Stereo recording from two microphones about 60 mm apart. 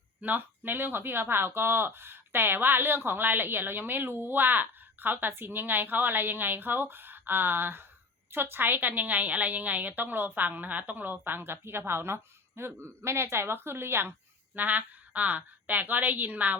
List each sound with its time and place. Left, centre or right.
0.2 s speech: right